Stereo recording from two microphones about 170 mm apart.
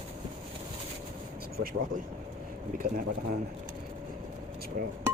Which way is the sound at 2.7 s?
50° right (ahead or behind).